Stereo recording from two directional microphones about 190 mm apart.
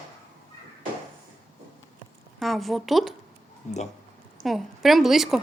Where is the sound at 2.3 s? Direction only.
Centre (ahead or behind).